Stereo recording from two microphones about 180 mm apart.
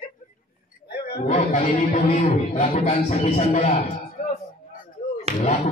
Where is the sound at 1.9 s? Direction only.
50° left (ahead or behind).